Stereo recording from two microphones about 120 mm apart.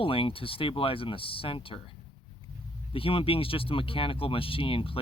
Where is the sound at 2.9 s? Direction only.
50° left (ahead or behind).